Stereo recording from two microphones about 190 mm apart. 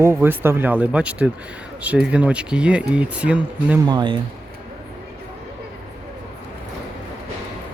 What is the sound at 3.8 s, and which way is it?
Speech, 25° right (ahead or behind).